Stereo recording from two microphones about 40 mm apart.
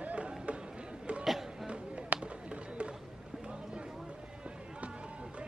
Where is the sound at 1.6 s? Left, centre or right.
Right.